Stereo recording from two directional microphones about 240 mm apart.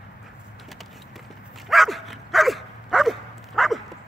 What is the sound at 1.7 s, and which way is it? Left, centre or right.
Dog, centre.